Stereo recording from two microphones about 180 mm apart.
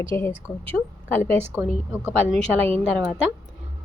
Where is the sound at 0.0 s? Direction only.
15° left (ahead or behind).